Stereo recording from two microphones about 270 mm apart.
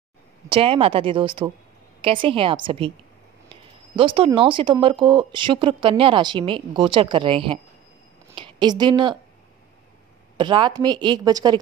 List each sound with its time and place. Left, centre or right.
0.5 s a woman's voice: right
10.3 s a woman's voice: centre